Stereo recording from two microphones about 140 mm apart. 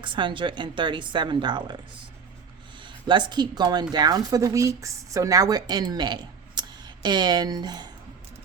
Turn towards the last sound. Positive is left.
turn(degrees=-30)  # may be behind; listen again after turning